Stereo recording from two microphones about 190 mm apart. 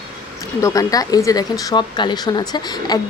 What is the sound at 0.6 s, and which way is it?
Speech, 20° left (ahead or behind).